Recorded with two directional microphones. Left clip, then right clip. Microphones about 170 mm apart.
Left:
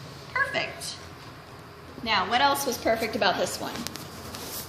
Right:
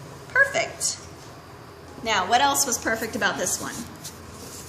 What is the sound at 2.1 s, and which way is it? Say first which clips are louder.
A woman's voice: right 2 dB; 30° right (ahead or behind).